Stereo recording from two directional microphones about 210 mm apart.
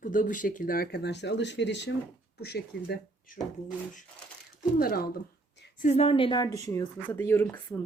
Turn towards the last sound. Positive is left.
turn(degrees=10)  # may be behind; listen again after turning